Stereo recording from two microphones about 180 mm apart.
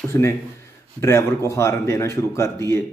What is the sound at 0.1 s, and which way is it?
A man's voice, 15° left (ahead or behind).